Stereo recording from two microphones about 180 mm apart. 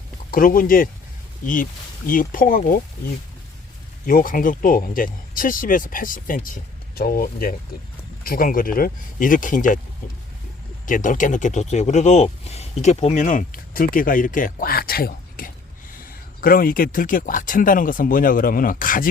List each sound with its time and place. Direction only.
0.3 s speech: 50° left (ahead or behind)
4.0 s speech: 50° left (ahead or behind)
10.8 s speech: 45° left (ahead or behind)